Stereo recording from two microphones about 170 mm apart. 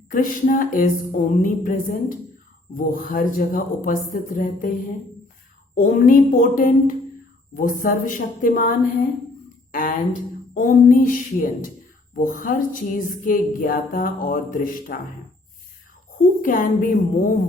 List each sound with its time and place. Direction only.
0.1 s music: 50° left (ahead or behind)
2.7 s speech: 55° left (ahead or behind)
3.8 s music: 55° left (ahead or behind)
5.7 s music: 50° left (ahead or behind)
16.4 s music: 50° left (ahead or behind)